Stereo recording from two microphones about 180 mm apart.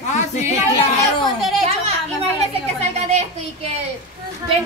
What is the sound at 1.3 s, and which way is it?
Speech, centre (ahead or behind).